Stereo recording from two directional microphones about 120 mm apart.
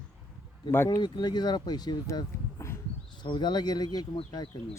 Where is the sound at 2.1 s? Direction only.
25° left (ahead or behind).